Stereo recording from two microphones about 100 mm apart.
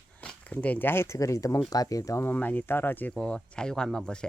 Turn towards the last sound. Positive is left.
turn(degrees=5)  # may be behind; listen again after turning